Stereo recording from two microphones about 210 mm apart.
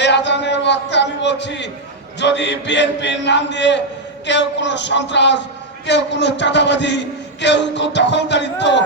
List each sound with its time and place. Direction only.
0.0 s a man's voice: 55° left (ahead or behind)